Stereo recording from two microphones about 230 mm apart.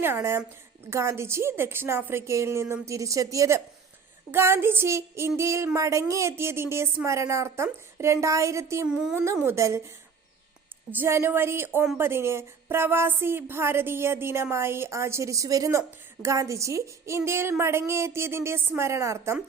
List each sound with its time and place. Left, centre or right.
0.0 s a woman's voice: centre
10.9 s a woman's voice: centre